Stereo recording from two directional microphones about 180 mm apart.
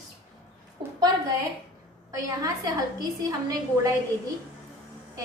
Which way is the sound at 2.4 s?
20° right (ahead or behind).